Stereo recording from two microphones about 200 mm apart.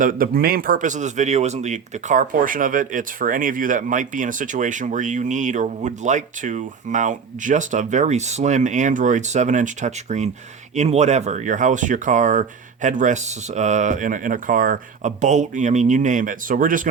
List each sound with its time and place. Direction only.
0.0 s speech: 45° right (ahead or behind)